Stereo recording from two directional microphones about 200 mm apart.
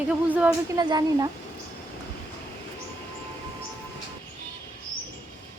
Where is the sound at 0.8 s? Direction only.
20° right (ahead or behind).